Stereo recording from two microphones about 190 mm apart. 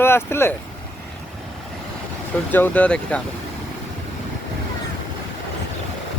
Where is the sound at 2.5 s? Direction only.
10° left (ahead or behind).